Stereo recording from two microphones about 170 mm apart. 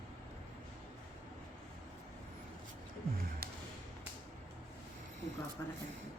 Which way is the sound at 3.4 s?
65° right (ahead or behind).